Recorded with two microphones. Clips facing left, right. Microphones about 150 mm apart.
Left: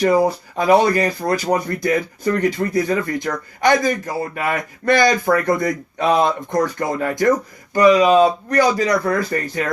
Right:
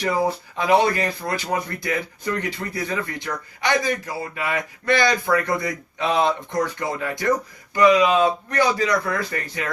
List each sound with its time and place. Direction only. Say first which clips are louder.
0.0 s speech: left 6 dB; 45° left (ahead or behind)